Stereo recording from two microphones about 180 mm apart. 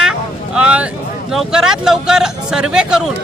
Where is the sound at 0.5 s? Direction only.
5° right (ahead or behind).